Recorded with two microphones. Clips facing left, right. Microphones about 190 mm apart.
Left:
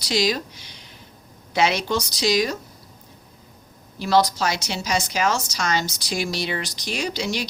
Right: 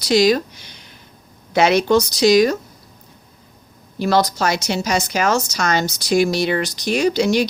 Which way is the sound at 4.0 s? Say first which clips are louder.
Right 2 dB; 55° right (ahead or behind).